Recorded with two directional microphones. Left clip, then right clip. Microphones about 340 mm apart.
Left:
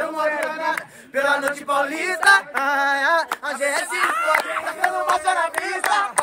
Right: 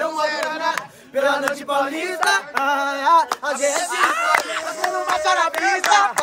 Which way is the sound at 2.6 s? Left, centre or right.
Centre.